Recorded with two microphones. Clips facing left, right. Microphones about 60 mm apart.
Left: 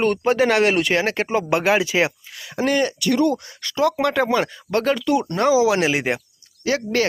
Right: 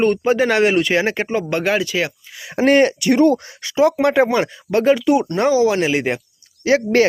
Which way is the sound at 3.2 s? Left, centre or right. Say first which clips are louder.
Right 7 dB; right.